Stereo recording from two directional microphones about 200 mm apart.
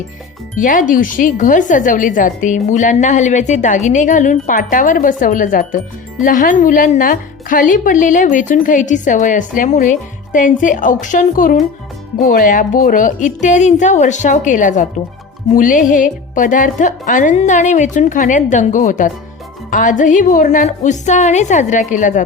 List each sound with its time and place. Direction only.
0.5 s a woman's voice: 40° left (ahead or behind)